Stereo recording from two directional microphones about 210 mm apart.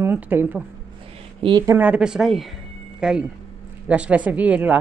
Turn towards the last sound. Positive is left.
turn(degrees=-5)  # may be behind; listen again after turning